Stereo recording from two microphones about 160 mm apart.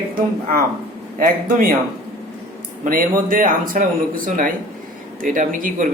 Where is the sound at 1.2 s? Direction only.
60° right (ahead or behind).